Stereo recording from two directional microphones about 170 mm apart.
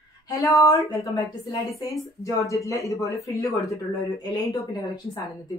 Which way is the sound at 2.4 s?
20° left (ahead or behind).